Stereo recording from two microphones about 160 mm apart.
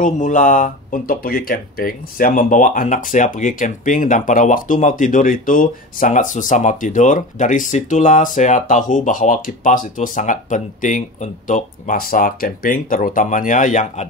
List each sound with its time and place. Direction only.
0.0 s speech: 55° left (ahead or behind)